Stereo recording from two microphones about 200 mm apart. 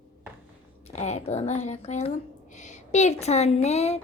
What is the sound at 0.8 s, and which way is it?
Speech, 35° left (ahead or behind).